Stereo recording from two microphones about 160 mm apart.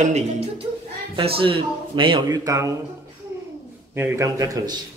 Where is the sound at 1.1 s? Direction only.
35° right (ahead or behind).